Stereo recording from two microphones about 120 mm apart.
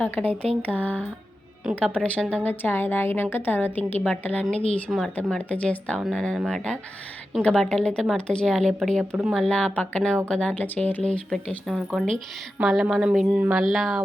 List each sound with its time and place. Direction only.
0.0 s a woman's voice: 15° left (ahead or behind)
5.1 s a woman's voice: 10° left (ahead or behind)